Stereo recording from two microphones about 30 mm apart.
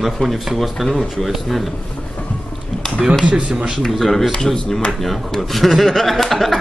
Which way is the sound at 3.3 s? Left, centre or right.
Right.